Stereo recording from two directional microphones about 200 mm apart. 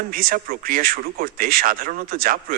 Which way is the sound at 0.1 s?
45° right (ahead or behind).